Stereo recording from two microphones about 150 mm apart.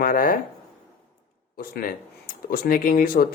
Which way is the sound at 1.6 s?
75° left (ahead or behind).